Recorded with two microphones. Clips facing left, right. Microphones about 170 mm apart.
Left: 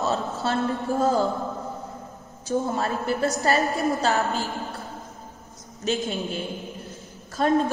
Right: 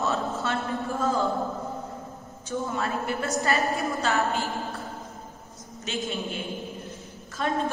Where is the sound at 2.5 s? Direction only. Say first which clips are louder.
Left 4 dB; 40° left (ahead or behind).